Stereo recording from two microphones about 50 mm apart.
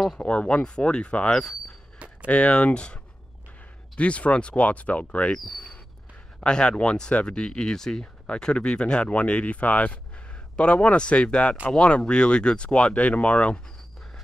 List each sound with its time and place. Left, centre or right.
0.2 s speech: left
1.3 s speech: centre
2.2 s speech: left
6.4 s speech: centre